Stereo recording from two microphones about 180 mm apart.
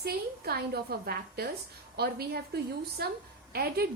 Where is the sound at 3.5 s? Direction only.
60° right (ahead or behind).